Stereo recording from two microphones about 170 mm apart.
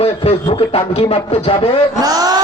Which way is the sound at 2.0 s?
20° right (ahead or behind).